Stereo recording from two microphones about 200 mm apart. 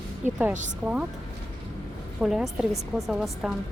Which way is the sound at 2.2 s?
5° right (ahead or behind).